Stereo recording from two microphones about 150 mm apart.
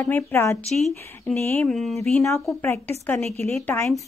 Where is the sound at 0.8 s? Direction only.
Centre (ahead or behind).